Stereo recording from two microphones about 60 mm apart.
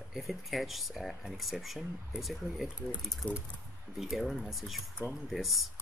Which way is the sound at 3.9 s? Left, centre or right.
Centre.